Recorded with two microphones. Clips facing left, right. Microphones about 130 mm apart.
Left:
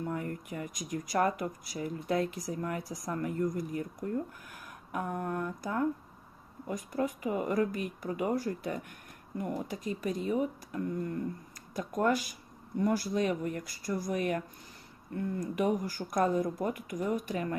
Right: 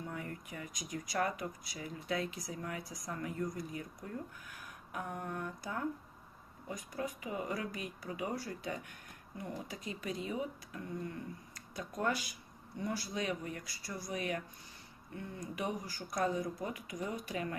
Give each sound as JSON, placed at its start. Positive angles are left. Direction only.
{"t": 0.0, "sound": "speech", "side_deg": 50}